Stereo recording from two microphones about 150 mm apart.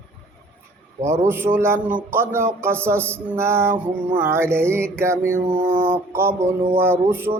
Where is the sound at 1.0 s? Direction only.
15° right (ahead or behind).